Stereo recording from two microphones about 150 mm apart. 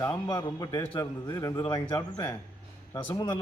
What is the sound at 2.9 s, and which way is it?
Speech, 10° left (ahead or behind).